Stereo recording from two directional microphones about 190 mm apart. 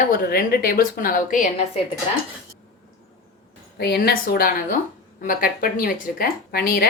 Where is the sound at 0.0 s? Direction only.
50° left (ahead or behind).